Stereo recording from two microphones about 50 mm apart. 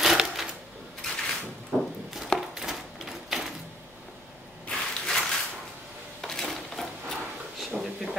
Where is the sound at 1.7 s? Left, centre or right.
Centre.